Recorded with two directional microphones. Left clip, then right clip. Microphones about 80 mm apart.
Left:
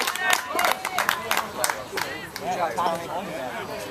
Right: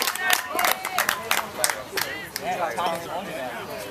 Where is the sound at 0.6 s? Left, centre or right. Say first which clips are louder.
Even; centre.